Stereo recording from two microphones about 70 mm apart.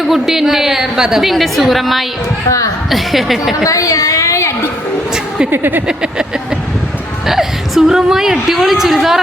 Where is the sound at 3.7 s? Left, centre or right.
Left.